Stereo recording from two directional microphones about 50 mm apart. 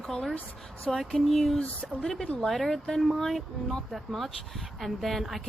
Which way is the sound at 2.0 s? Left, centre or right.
Centre.